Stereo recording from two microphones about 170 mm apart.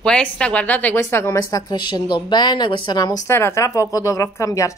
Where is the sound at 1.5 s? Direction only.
25° left (ahead or behind).